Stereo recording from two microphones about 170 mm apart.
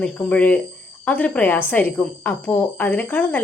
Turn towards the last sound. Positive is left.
turn(degrees=10)  # may be behind; listen again after turning